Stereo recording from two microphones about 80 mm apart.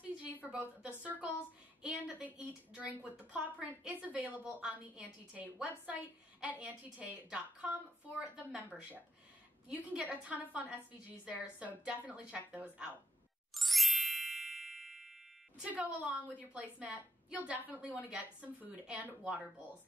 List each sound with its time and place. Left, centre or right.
0.3 s a woman's voice: right
13.5 s ding: centre
15.6 s a woman's voice: centre